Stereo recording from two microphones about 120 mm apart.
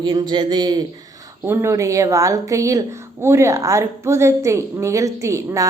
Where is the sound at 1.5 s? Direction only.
25° right (ahead or behind).